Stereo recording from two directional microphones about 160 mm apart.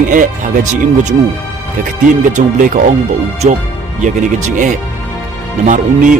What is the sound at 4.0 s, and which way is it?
Speech, 50° right (ahead or behind).